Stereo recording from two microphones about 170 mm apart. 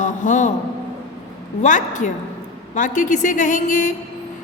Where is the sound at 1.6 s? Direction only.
45° left (ahead or behind).